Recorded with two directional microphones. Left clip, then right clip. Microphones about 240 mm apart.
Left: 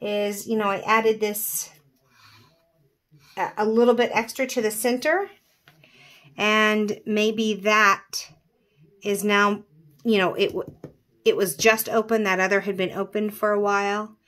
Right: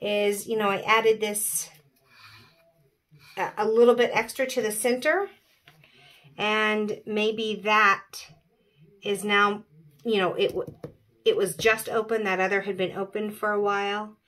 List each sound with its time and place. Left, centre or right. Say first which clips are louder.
0.0 s speech: right 1 dB; left
3.3 s a woman's voice: even; left